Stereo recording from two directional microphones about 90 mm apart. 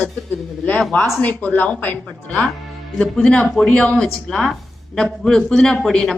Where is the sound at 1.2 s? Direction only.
20° left (ahead or behind).